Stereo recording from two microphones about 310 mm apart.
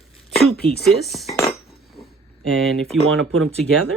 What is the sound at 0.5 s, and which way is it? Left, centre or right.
Speech, left.